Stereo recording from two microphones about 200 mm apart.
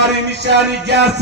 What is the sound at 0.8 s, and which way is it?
Speech, 60° right (ahead or behind).